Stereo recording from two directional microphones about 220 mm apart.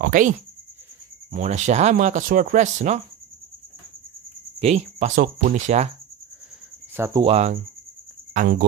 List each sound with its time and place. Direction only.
0.0 s speech: 40° right (ahead or behind)
1.3 s speech: 35° right (ahead or behind)
4.6 s speech: 30° right (ahead or behind)
7.2 s cricket: 30° right (ahead or behind)
8.3 s speech: 40° right (ahead or behind)